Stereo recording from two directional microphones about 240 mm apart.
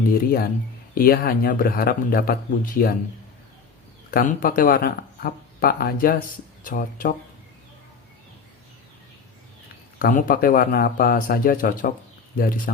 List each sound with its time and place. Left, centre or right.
0.1 s speech: left
4.1 s speech: left
10.0 s speech: left